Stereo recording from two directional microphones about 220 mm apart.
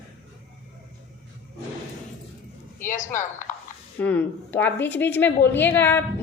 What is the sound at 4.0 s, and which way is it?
A woman's voice, 5° left (ahead or behind).